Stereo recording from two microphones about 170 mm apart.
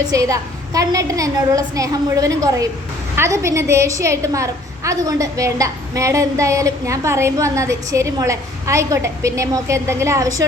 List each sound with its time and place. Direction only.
0.1 s a woman's voice: 20° right (ahead or behind)